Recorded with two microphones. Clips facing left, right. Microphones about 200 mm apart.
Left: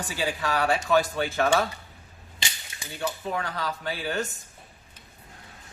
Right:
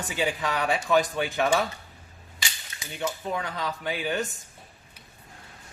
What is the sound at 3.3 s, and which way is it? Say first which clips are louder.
Speech: even; 20° right (ahead or behind).